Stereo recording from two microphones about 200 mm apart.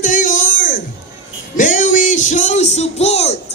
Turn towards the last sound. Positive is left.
turn(degrees=30)  # may be behind; listen again after turning